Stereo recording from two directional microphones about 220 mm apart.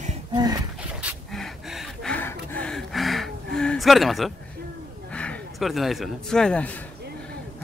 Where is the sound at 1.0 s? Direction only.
Centre (ahead or behind).